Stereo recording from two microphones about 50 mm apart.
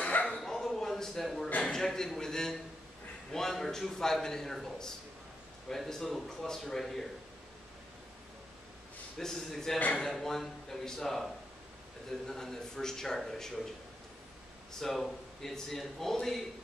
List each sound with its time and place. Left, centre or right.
0.0 s bow-wow: left
0.4 s a sound: centre
1.6 s a man's voice: centre
9.2 s a man's voice: centre
12.3 s a man's voice: centre
14.7 s a man's voice: centre